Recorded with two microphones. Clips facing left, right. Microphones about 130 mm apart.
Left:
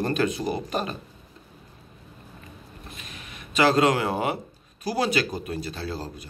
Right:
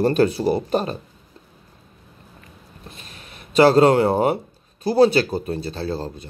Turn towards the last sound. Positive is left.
turn(degrees=-25)  # may be behind; listen again after turning